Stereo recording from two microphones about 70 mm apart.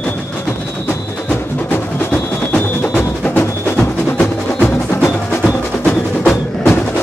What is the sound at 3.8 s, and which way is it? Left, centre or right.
Music, centre.